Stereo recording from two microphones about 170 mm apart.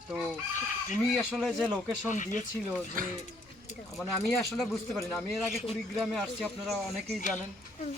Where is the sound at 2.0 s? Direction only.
50° left (ahead or behind).